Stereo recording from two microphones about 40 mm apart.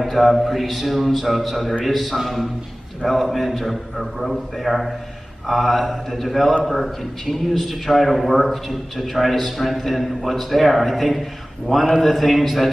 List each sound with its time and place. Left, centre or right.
0.0 s a man's voice: centre